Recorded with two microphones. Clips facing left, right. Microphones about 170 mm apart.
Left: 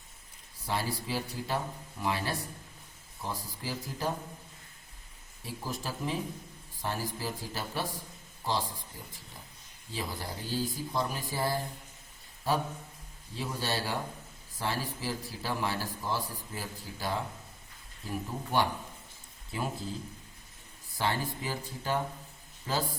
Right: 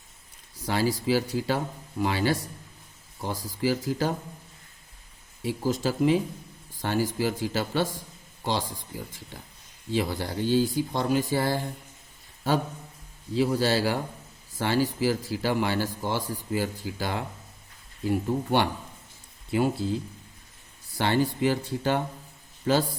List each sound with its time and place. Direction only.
0.6 s speech: 90° right
5.4 s speech: 80° right
13.3 s speech: 75° right (ahead or behind)
20.9 s speech: 80° right